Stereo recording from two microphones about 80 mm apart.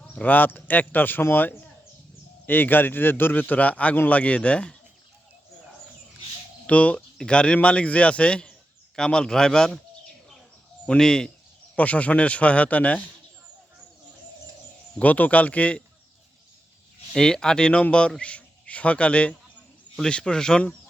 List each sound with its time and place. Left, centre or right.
0.1 s a man's voice: left
6.7 s speech: centre
10.8 s speech: centre
14.9 s speech: centre
17.1 s a man's voice: centre